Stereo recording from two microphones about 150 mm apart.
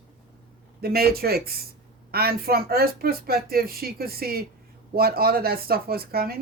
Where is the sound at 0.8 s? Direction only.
90° right.